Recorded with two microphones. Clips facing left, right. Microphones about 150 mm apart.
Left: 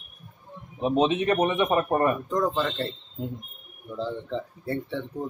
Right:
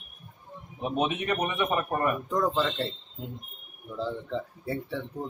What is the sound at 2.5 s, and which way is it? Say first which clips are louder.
Speech: left 1 dB; 5° right (ahead or behind).